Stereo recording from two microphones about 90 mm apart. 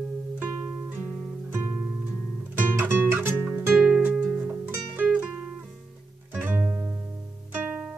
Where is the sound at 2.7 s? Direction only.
25° right (ahead or behind).